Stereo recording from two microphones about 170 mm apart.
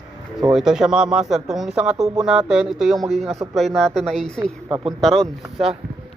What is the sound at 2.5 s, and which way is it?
Speech, 5° right (ahead or behind).